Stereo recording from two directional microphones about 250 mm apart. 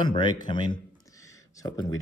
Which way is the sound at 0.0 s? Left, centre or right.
Centre.